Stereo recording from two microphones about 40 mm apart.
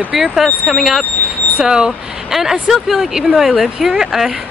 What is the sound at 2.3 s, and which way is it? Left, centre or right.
Speech, centre.